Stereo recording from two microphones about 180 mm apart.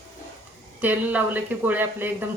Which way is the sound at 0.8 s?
10° right (ahead or behind).